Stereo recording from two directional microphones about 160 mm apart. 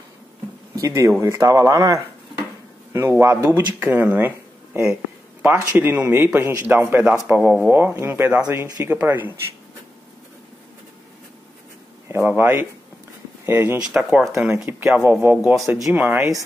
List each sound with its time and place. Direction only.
0.7 s a man's voice: 20° right (ahead or behind)
5.4 s a man's voice: 10° right (ahead or behind)
12.1 s a man's voice: 15° right (ahead or behind)
15.3 s a man's voice: centre (ahead or behind)